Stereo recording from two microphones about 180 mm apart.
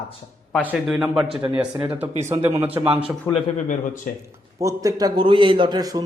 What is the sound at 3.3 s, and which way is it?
Speech, 20° left (ahead or behind).